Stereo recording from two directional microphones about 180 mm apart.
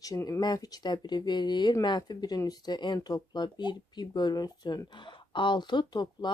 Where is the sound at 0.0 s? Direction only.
20° left (ahead or behind).